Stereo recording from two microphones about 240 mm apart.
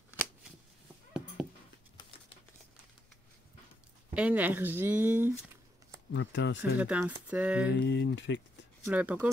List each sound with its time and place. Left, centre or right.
4.1 s speech: centre
6.1 s speech: left
6.8 s speech: centre
7.7 s speech: left
8.8 s speech: centre